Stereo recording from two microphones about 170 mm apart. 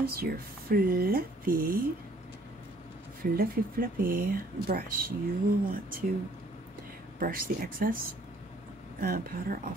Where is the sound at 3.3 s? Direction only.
60° right (ahead or behind).